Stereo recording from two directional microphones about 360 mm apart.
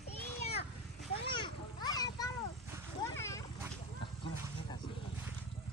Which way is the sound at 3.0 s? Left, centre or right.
Centre.